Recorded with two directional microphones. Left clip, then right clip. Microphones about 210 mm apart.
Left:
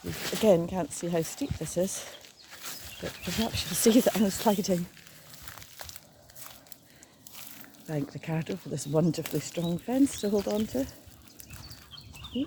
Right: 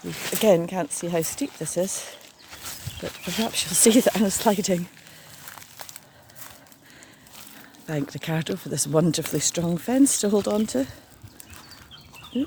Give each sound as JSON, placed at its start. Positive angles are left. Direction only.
{"t": 0.0, "sound": "speech", "side_deg": 0}
{"t": 0.4, "sound": "speech", "side_deg": -20}
{"t": 2.5, "sound": "wild animals", "side_deg": -5}
{"t": 3.4, "sound": "speech", "side_deg": -25}
{"t": 5.5, "sound": "a sound", "side_deg": -5}
{"t": 7.9, "sound": "speech", "side_deg": -30}
{"t": 10.3, "sound": "speech", "side_deg": -55}
{"t": 12.3, "sound": "speech", "side_deg": -45}